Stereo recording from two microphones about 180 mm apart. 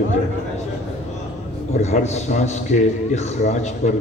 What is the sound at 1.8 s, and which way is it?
A man's voice, 40° left (ahead or behind).